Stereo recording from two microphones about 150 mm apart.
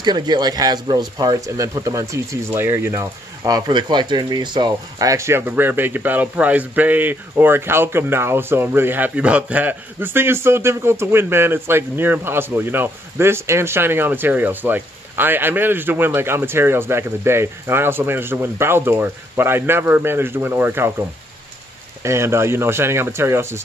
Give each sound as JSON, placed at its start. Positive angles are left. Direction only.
{"t": 0.0, "sound": "speech", "side_deg": -30}
{"t": 22.0, "sound": "speech", "side_deg": -20}